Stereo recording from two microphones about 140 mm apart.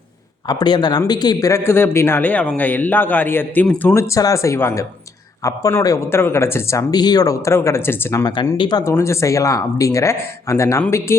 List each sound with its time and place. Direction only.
0.4 s speech: 30° left (ahead or behind)
8.5 s speech: 30° left (ahead or behind)
8.8 s speech: 20° left (ahead or behind)